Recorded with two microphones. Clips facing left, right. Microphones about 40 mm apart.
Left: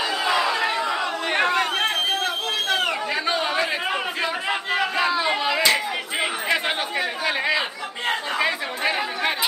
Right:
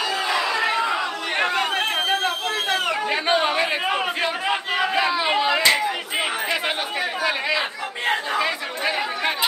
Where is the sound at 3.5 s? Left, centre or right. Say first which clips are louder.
Right 2 dB; centre.